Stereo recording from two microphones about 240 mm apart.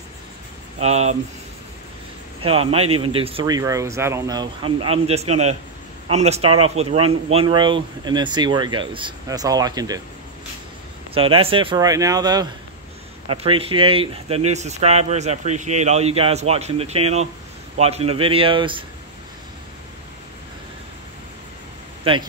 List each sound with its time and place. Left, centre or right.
0.7 s speech: right
2.4 s speech: right
11.1 s speech: right
22.1 s speech: right